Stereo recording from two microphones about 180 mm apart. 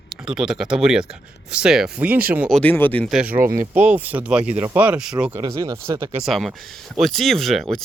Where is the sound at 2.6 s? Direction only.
10° left (ahead or behind).